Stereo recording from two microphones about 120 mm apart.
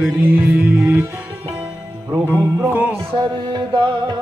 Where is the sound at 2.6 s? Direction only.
15° right (ahead or behind).